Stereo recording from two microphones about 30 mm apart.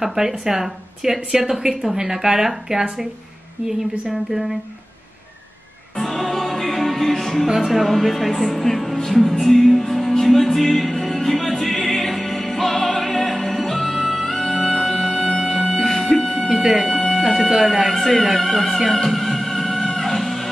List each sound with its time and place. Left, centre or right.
0.0 s a woman's voice: centre
4.1 s a woman's voice: centre
5.9 s music: centre
8.0 s speech: centre
9.3 s music: centre
16.5 s a woman's voice: centre
18.2 s music: centre